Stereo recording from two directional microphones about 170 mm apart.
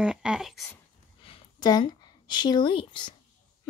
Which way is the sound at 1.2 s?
30° left (ahead or behind).